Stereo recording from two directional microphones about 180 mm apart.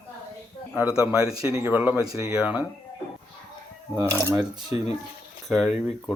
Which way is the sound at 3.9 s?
10° right (ahead or behind).